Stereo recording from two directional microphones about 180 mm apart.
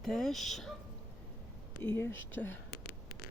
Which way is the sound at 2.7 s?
55° left (ahead or behind).